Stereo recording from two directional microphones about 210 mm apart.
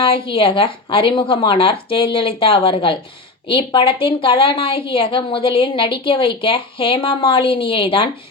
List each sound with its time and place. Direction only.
0.0 s a woman's voice: 25° left (ahead or behind)